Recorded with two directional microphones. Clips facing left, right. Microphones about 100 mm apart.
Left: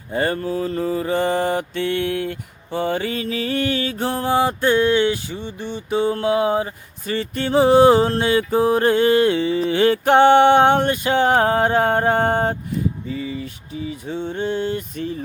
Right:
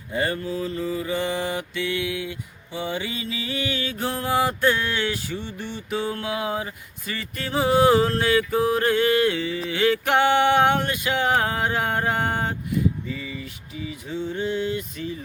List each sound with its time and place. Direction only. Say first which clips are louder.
0.1 s mantra: left 4 dB; 35° left (ahead or behind)
14.9 s speech: left 5 dB; 45° left (ahead or behind)